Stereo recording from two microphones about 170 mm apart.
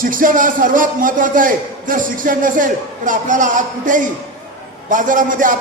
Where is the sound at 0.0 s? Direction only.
55° right (ahead or behind).